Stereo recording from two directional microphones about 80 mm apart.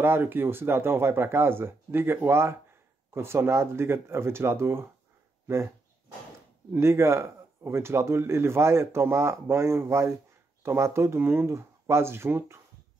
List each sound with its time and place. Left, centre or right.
0.0 s a man's voice: right
6.7 s a man's voice: right